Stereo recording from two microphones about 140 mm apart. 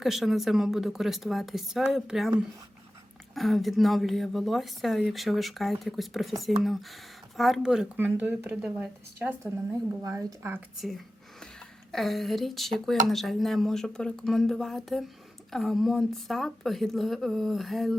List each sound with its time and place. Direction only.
0.0 s a woman's voice: centre (ahead or behind)
3.3 s a woman's voice: centre (ahead or behind)
7.3 s a woman's voice: centre (ahead or behind)
10.0 s a woman's voice: 25° right (ahead or behind)
10.8 s a sound: centre (ahead or behind)
11.9 s a woman's voice: centre (ahead or behind)